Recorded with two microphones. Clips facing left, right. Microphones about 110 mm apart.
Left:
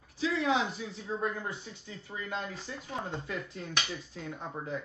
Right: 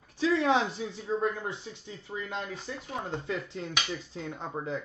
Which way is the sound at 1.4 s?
25° right (ahead or behind).